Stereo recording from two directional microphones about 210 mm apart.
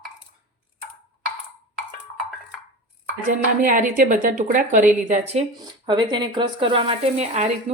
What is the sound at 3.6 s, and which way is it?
A woman's voice, 40° right (ahead or behind).